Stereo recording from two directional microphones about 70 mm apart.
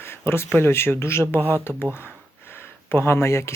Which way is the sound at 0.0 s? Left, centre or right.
Left.